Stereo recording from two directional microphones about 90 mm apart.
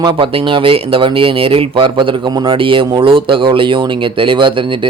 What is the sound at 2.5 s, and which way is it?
Speech, 70° right (ahead or behind).